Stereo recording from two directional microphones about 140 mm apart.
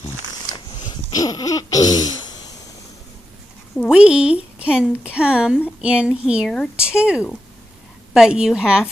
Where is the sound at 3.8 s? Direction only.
10° right (ahead or behind).